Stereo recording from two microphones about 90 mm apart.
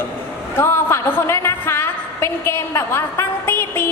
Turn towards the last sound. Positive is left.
turn(degrees=25)  # may be behind; listen again after turning